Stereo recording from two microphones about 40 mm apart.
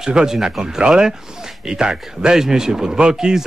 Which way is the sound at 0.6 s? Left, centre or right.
Centre.